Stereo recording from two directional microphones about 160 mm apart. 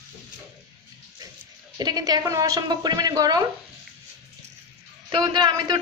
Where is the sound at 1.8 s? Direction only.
25° right (ahead or behind).